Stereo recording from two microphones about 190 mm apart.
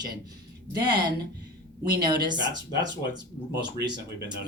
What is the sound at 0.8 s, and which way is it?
Speech, 25° right (ahead or behind).